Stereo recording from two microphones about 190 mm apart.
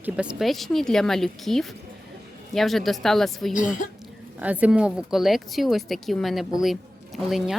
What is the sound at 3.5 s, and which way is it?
Speech, 45° left (ahead or behind).